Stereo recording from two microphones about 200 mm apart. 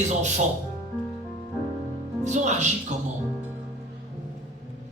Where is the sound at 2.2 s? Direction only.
35° right (ahead or behind).